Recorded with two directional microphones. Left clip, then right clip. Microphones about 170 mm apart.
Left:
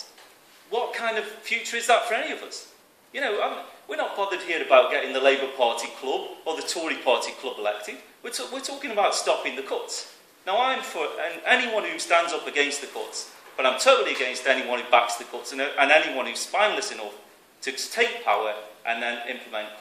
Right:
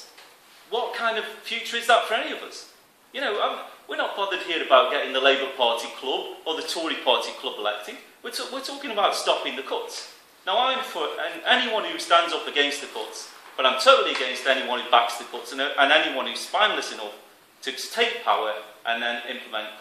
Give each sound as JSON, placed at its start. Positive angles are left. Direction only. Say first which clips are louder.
{"t": 0.7, "sound": "a man's voice", "louder": "right 1 dB", "side_deg": 15}
{"t": 3.9, "sound": "a man's voice", "louder": "right 1 dB", "side_deg": 15}